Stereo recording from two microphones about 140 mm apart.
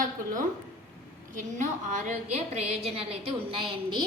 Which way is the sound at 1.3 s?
60° right (ahead or behind).